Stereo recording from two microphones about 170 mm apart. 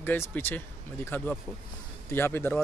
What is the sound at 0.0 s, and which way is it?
Speech, 10° left (ahead or behind).